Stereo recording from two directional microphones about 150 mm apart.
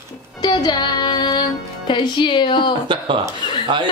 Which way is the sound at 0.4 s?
30° left (ahead or behind).